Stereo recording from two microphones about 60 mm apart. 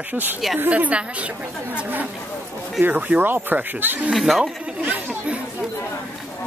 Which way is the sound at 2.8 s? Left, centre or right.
Right.